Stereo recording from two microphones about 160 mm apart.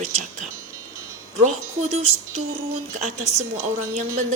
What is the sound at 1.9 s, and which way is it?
A woman's voice, 45° right (ahead or behind).